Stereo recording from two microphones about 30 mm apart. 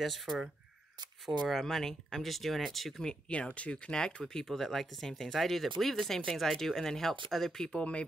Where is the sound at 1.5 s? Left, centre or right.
Centre.